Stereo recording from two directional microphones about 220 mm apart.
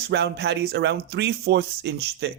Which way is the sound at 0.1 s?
50° right (ahead or behind).